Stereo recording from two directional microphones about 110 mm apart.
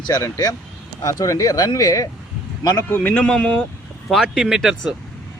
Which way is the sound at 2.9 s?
15° left (ahead or behind).